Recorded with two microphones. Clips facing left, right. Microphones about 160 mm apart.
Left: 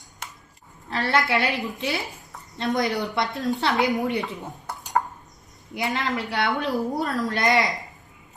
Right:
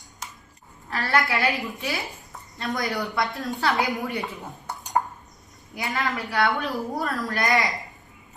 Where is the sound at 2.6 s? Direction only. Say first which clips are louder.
Left 4 dB; 20° left (ahead or behind).